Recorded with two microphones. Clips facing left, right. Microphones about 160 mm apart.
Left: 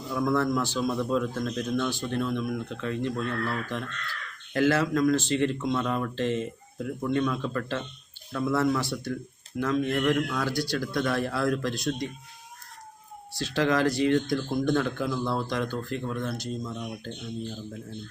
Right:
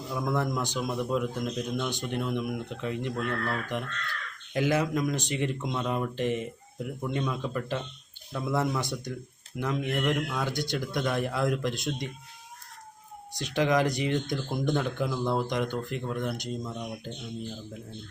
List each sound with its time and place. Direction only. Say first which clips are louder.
0.1 s speech: left 4 dB; 15° right (ahead or behind)
13.3 s speech: even; 20° right (ahead or behind)